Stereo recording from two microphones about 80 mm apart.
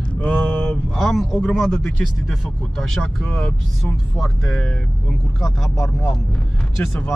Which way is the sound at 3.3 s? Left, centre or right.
Centre.